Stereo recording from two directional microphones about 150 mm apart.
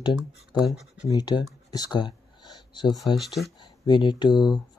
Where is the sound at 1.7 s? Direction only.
25° left (ahead or behind).